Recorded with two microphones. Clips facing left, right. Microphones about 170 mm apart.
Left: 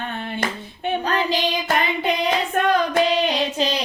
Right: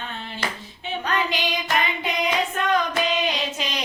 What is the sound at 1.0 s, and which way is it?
Child singing, 35° left (ahead or behind).